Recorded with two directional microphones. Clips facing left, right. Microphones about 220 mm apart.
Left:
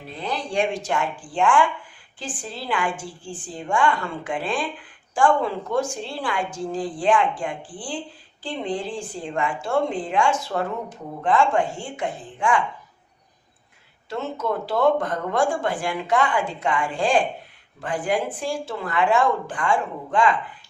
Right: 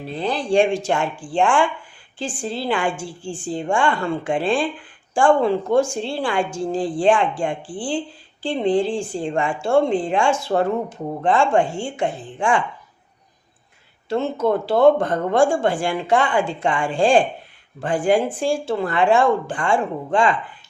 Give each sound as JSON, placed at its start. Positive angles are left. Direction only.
{"t": 0.1, "sound": "a woman's voice", "side_deg": -30}
{"t": 14.1, "sound": "a woman's voice", "side_deg": -30}